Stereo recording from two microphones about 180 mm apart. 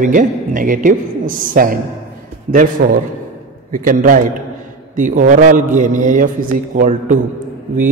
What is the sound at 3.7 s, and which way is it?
A man's voice, 45° right (ahead or behind).